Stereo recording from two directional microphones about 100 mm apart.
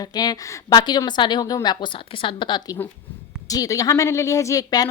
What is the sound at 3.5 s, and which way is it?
Speech, 35° left (ahead or behind).